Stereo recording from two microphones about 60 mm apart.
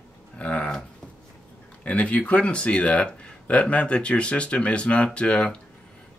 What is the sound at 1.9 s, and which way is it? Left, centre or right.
A man's voice, left.